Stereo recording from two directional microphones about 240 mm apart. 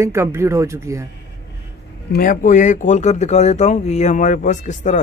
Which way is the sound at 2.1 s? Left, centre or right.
Left.